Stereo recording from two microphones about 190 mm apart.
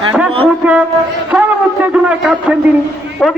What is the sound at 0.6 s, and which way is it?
Speech, 5° right (ahead or behind).